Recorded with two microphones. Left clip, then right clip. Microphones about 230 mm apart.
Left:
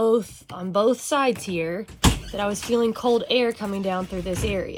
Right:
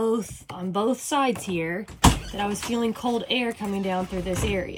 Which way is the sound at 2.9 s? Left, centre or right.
Centre.